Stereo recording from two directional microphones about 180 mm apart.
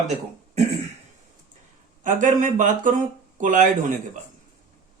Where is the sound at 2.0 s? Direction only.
45° right (ahead or behind).